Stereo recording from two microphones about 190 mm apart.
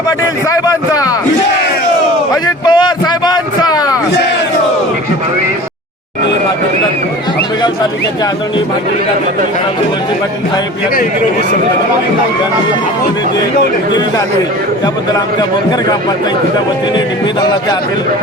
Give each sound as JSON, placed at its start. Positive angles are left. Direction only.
{"t": 0.6, "sound": "a man's voice", "side_deg": 20}
{"t": 2.3, "sound": "a man's voice", "side_deg": 25}